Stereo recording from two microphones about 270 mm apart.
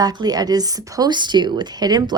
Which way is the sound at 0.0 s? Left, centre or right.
Centre.